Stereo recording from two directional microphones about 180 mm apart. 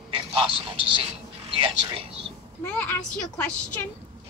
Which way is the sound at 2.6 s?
10° left (ahead or behind).